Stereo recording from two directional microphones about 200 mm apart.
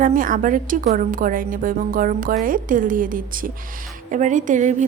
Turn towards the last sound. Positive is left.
turn(degrees=-40)  # may be behind; listen again after turning